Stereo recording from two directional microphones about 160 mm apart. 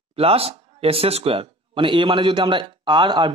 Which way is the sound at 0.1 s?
40° right (ahead or behind).